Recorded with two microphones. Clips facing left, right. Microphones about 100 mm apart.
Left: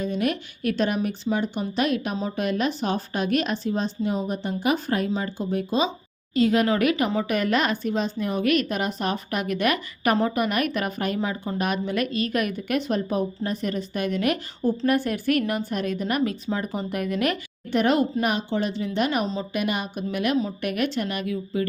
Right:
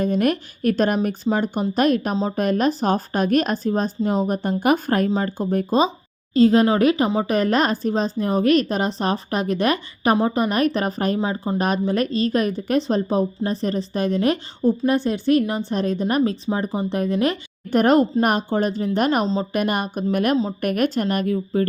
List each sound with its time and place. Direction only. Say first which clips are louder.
0.0 s speech: right 5 dB; 50° right (ahead or behind)
6.3 s a woman's voice: right 5 dB; 35° right (ahead or behind)
11.2 s speech: right 4 dB; 25° right (ahead or behind)
11.5 s a woman's voice: right 5 dB; 35° right (ahead or behind)
17.7 s speech: right 5 dB; 45° right (ahead or behind)
19.2 s a woman's voice: right 5 dB; 30° right (ahead or behind)
19.5 s speech: right 4 dB; 45° right (ahead or behind)